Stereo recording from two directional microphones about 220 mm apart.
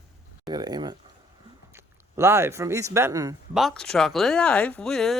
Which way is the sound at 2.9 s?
15° right (ahead or behind).